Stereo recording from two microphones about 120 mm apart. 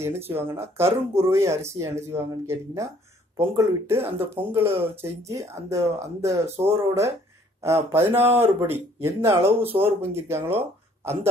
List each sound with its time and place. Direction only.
0.3 s speech: 20° right (ahead or behind)